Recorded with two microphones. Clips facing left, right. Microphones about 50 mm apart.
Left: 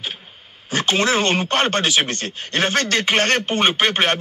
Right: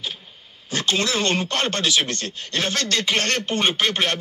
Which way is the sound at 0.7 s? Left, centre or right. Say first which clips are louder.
Left 4 dB; left.